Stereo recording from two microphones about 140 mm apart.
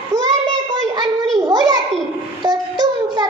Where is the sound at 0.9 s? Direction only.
25° right (ahead or behind).